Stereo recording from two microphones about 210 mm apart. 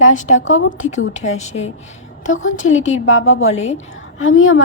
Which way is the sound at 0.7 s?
35° left (ahead or behind).